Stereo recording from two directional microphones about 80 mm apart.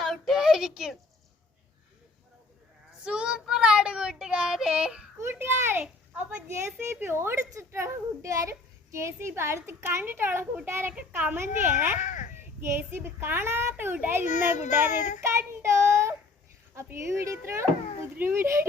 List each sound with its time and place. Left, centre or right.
0.0 s child singing: centre
3.0 s child singing: centre
5.2 s a child's voice: right